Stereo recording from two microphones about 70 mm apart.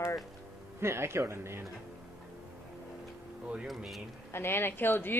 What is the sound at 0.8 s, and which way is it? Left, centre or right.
Speech, right.